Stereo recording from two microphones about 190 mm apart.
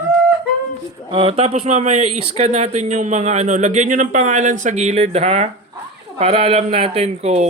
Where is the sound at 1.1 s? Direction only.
30° right (ahead or behind).